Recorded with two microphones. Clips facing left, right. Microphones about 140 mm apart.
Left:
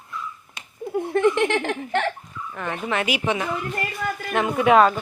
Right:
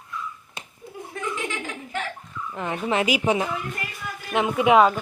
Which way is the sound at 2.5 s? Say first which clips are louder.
Right 1 dB; 30° right (ahead or behind).